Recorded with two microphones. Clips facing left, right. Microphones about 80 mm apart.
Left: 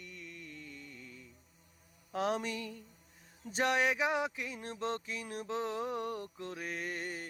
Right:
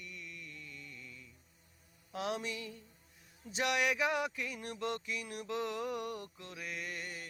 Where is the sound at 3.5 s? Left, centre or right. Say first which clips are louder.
Left 2 dB; left.